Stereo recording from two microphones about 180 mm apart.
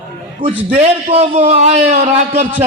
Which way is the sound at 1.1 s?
35° right (ahead or behind).